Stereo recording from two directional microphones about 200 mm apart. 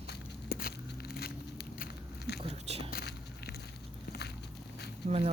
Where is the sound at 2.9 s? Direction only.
50° left (ahead or behind).